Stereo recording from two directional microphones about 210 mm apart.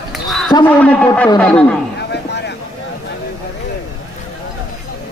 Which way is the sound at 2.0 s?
55° left (ahead or behind).